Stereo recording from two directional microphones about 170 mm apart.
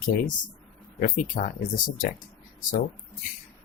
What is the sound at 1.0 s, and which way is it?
Speech, 50° left (ahead or behind).